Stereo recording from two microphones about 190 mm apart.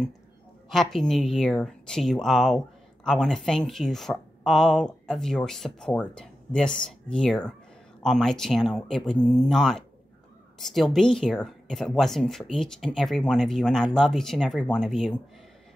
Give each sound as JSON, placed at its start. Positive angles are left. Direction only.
{"t": 0.7, "sound": "a woman's voice", "side_deg": 0}